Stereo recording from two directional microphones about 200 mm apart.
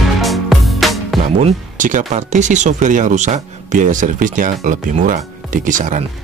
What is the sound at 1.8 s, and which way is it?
Speech, 40° right (ahead or behind).